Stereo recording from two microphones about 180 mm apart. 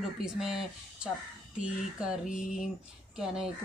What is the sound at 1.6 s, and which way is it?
Speech, 5° right (ahead or behind).